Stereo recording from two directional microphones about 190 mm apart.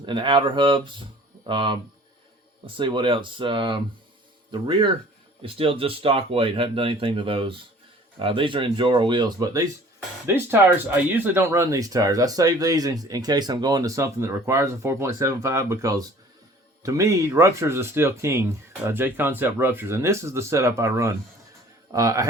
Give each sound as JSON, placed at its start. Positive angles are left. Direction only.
{"t": 0.0, "sound": "speech", "side_deg": -25}